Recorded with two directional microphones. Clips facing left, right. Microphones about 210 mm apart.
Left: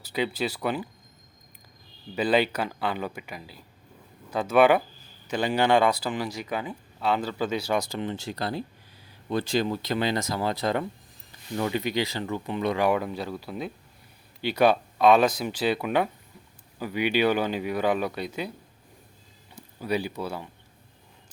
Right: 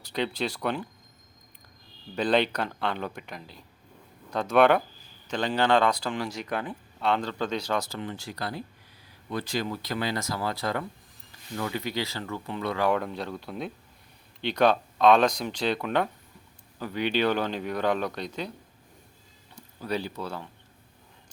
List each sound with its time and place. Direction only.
0.0 s speech: 5° left (ahead or behind)
2.1 s speech: 5° left (ahead or behind)
13.0 s speech: 5° left (ahead or behind)
19.5 s speech: 10° left (ahead or behind)